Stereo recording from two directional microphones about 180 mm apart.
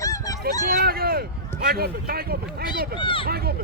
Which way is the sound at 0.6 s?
55° right (ahead or behind).